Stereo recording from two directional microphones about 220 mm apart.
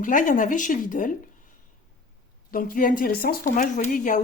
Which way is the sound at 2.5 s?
40° left (ahead or behind).